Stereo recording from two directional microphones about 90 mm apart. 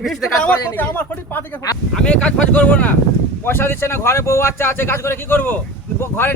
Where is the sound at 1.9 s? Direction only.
10° left (ahead or behind).